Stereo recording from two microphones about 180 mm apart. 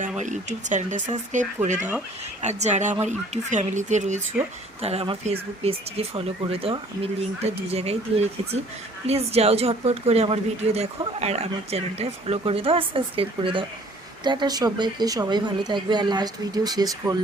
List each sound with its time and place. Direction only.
0.2 s speech: 40° right (ahead or behind); by 17.2 s 20° right (ahead or behind)